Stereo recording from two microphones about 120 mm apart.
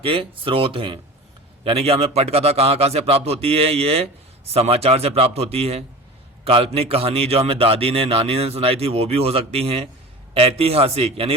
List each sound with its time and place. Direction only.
0.0 s a man's voice: 50° right (ahead or behind)